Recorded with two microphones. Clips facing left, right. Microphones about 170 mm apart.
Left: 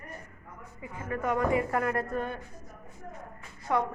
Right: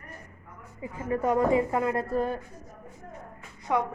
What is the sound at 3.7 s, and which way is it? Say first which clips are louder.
Speech: right 1 dB; 15° right (ahead or behind).